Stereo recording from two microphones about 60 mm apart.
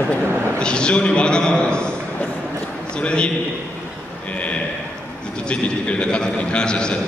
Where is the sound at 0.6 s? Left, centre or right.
Centre.